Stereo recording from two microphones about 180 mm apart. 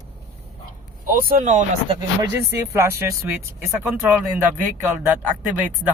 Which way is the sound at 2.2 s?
15° right (ahead or behind).